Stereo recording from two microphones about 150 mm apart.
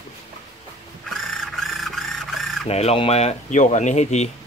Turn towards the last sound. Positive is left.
turn(degrees=50)  # may be behind; listen again after turning